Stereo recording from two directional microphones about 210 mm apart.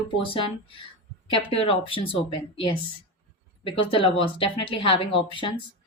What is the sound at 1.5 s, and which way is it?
Speech, 30° left (ahead or behind).